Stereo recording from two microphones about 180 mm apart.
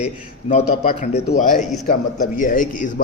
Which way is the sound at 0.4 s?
35° left (ahead or behind).